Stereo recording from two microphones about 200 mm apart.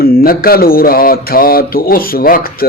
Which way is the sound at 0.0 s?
50° left (ahead or behind).